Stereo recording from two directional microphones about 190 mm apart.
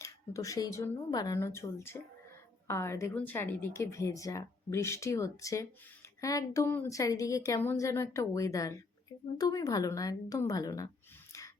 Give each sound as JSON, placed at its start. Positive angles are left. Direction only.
{"t": 0.0, "sound": "a woman's voice", "side_deg": 15}
{"t": 11.3, "sound": "breathing", "side_deg": 15}